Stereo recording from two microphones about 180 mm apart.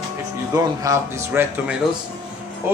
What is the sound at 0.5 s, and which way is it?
A man's voice, 20° right (ahead or behind).